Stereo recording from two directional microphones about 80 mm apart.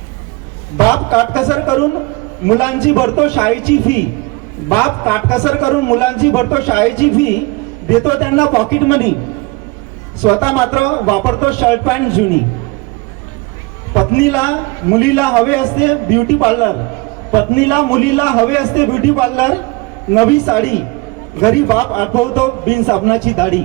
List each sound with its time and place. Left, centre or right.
0.9 s a man's voice: left
10.3 s a man's voice: left
14.0 s a man's voice: left